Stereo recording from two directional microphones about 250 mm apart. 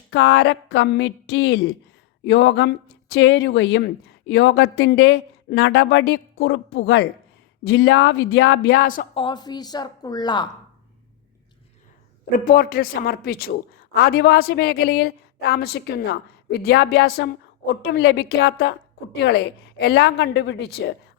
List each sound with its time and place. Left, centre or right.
0.1 s a man's voice: left
9.2 s a woman's voice: centre
12.5 s a man's voice: left